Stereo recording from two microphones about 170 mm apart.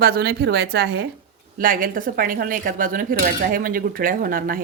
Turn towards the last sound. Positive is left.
turn(degrees=-55)  # may be behind; listen again after turning